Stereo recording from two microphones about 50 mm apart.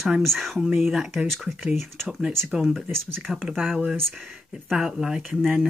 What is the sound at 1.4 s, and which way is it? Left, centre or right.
Speech, right.